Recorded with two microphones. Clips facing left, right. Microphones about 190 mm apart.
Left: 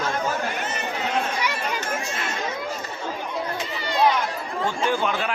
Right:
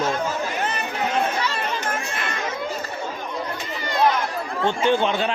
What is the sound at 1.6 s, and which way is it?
Chatter, 55° right (ahead or behind).